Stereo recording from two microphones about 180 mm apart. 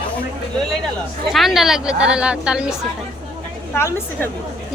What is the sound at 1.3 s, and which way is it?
Speech, centre (ahead or behind).